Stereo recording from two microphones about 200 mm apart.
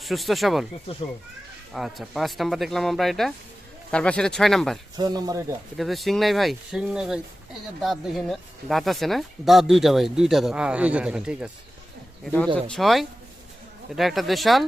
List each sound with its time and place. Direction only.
0.0 s speech: centre (ahead or behind)
1.7 s speech: centre (ahead or behind)
4.9 s speech: 20° right (ahead or behind)
5.7 s speech: centre (ahead or behind)
12.2 s speech: 5° left (ahead or behind)